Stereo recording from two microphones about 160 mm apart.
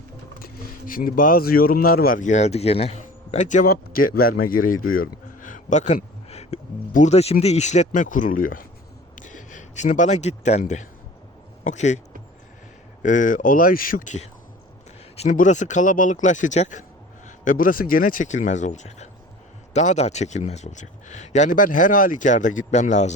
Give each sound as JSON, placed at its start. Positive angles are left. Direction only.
{"t": 0.4, "sound": "a man's voice", "side_deg": 60}
{"t": 13.0, "sound": "a man's voice", "side_deg": 50}